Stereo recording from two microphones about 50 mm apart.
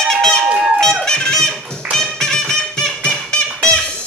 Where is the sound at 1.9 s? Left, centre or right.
Centre.